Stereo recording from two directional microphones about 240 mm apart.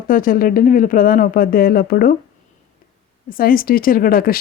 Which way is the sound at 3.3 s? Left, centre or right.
Left.